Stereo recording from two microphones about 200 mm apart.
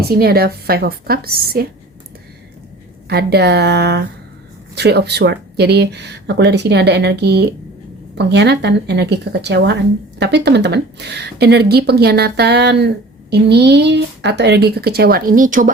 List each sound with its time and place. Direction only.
0.1 s a woman's voice: 50° right (ahead or behind)
3.1 s speech: 55° right (ahead or behind)